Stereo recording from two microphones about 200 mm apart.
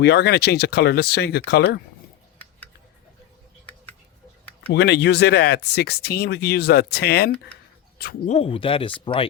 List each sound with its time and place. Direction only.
0.0 s speech: 55° left (ahead or behind)
4.7 s speech: 60° left (ahead or behind)
8.3 s speech: 30° left (ahead or behind)